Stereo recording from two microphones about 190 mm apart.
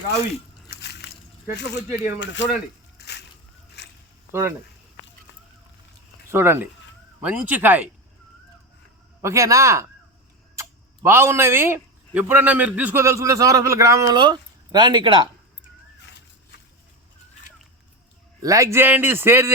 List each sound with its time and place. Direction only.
0.7 s squish: 60° left (ahead or behind)
1.5 s speech: 65° left (ahead or behind)
3.0 s slosh: 65° left (ahead or behind)
3.8 s zipper: 65° left (ahead or behind)
4.3 s speech: 15° right (ahead or behind)
6.2 s speech: 15° right (ahead or behind)
9.2 s speech: 15° right (ahead or behind)
16.0 s a sound: 65° left (ahead or behind)
18.4 s speech: 15° right (ahead or behind)